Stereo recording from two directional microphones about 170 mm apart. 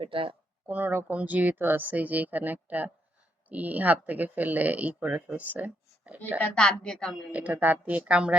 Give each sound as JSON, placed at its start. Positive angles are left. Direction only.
{"t": 0.0, "sound": "speech", "side_deg": -30}
{"t": 0.7, "sound": "speech", "side_deg": -10}
{"t": 6.4, "sound": "a woman's voice", "side_deg": 5}
{"t": 7.3, "sound": "speech", "side_deg": -10}